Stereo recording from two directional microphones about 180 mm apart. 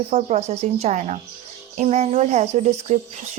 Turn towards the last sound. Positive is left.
turn(degrees=-35)  # may be behind; listen again after turning